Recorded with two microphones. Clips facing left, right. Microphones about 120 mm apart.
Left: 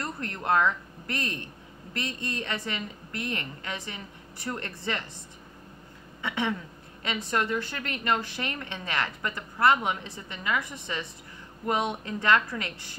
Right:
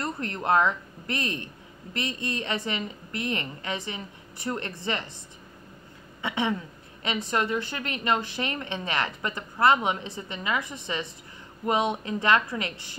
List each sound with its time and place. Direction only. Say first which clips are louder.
0.0 s a woman's voice: right 3 dB; 20° right (ahead or behind)
6.2 s a woman's voice: right 2 dB; 20° right (ahead or behind)